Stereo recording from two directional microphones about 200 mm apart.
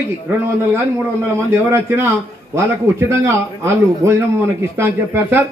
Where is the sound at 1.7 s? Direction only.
10° right (ahead or behind).